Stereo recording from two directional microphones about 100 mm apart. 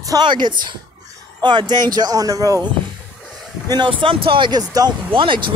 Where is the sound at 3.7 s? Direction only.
50° right (ahead or behind).